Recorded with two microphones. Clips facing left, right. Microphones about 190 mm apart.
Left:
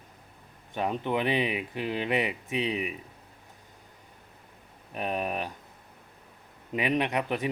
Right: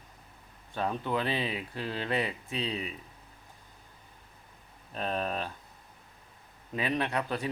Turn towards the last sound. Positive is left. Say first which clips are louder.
# left 3 dB
turn(degrees=20)  # may be behind; listen again after turning